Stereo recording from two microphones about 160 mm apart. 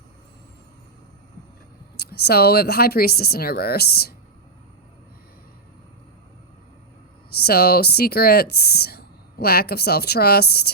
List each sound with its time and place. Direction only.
2.0 s speech: 80° left
7.3 s speech: 75° left (ahead or behind)